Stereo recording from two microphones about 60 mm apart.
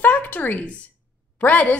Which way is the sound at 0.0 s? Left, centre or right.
Left.